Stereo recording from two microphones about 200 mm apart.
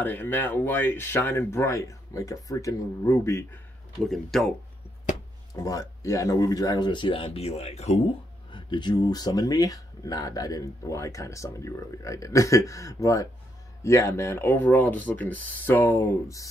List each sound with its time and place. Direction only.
0.0 s speech: 10° left (ahead or behind)
4.0 s speech: centre (ahead or behind)
5.6 s speech: 15° left (ahead or behind)